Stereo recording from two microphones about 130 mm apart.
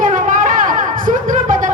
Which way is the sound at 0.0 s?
90° right.